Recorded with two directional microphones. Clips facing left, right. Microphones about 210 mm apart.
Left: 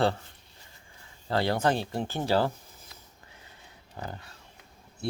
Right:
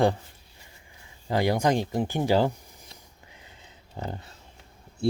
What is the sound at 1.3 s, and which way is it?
Speech, 15° right (ahead or behind).